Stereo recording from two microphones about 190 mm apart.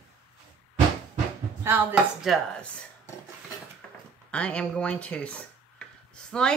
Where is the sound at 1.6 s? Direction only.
5° right (ahead or behind).